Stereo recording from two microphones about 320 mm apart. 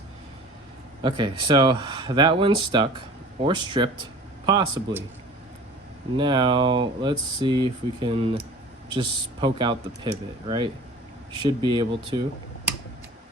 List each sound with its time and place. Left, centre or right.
1.0 s speech: centre
6.1 s speech: centre
11.4 s speech: centre